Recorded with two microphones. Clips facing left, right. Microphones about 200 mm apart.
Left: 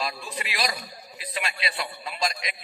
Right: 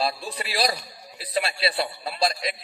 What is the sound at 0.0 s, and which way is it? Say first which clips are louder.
A man's voice: right 4 dB; 35° right (ahead or behind).